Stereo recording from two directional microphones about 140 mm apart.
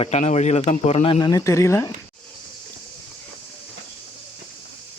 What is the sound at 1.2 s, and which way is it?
Speech, 25° left (ahead or behind).